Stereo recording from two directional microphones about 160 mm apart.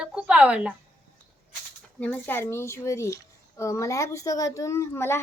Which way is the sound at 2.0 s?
10° left (ahead or behind).